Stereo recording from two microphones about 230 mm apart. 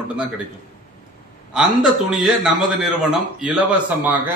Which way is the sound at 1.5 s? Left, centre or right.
Centre.